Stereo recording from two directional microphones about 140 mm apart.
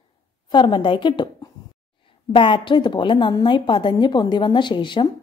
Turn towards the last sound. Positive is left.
turn(degrees=35)  # may be behind; listen again after turning